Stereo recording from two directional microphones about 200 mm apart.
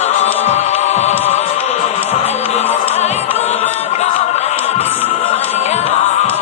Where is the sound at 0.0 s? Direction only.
35° left (ahead or behind).